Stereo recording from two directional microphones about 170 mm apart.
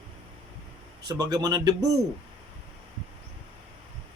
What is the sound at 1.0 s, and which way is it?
Speech, 20° right (ahead or behind).